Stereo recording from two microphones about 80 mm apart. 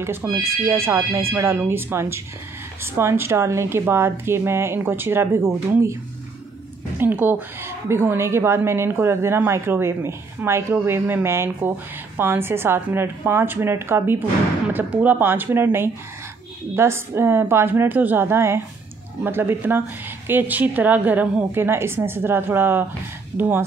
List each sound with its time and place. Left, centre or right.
0.0 s a woman's voice: right
7.0 s a woman's voice: right